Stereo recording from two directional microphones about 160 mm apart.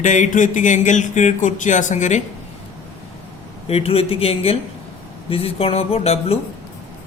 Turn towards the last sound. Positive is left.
turn(degrees=40)  # may be behind; listen again after turning